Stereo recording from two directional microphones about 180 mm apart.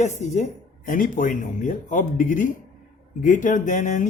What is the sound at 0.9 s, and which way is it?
Speech, 50° left (ahead or behind).